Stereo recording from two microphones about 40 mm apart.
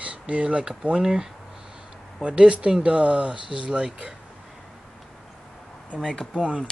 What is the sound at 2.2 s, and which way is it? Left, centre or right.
Speech, right.